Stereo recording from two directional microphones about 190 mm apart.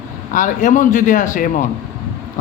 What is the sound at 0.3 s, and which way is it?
Speech, 45° left (ahead or behind).